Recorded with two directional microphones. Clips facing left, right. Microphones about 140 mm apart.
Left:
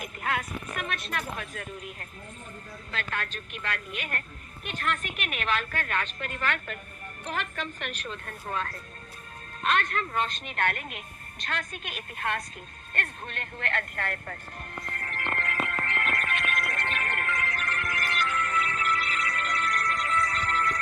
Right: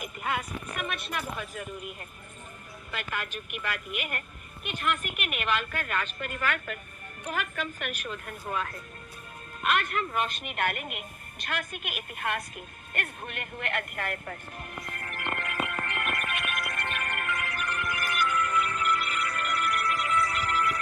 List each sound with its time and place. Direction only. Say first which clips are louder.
0.0 s a woman's voice: left 1 dB; 5° right (ahead or behind)
9.6 s a woman's voice: even; 5° right (ahead or behind)
11.4 s music: even; 5° right (ahead or behind)